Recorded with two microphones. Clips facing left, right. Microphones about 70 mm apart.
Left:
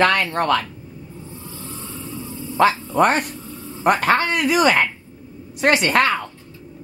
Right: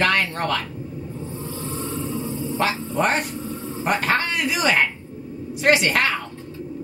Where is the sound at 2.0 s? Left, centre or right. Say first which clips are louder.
Right 5 dB; right.